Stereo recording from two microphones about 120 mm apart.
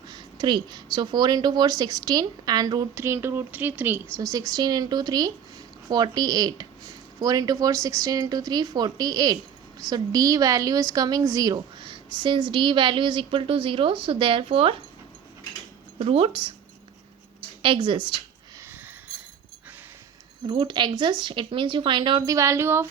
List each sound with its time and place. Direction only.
0.1 s speech: 40° right (ahead or behind)
2.9 s speech: 20° right (ahead or behind)
4.2 s speech: 30° right (ahead or behind); by 14.8 s 50° right (ahead or behind)
16.0 s speech: 50° right (ahead or behind)
17.6 s speech: 45° right (ahead or behind)
20.5 s speech: 40° right (ahead or behind)
22.4 s speech: 25° right (ahead or behind)